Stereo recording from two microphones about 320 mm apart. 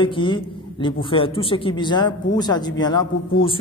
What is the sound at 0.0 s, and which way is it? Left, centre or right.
A man's voice, centre.